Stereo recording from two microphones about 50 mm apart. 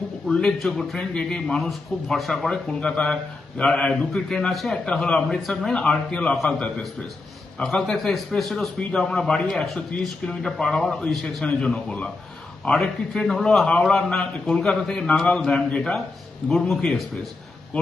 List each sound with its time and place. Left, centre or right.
0.3 s a man's voice: centre
4.9 s a man's voice: centre
13.8 s a man's voice: centre
14.2 s a man's voice: left